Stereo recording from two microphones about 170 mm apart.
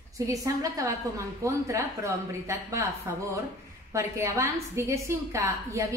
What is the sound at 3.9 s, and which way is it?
A woman's voice, 15° right (ahead or behind).